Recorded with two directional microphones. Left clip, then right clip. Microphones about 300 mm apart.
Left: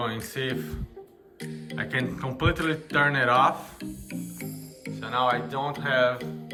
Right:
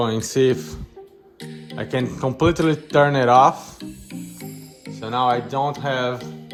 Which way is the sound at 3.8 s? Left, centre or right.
Centre.